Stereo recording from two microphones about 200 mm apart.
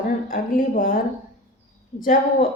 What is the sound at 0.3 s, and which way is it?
Speech, 45° left (ahead or behind).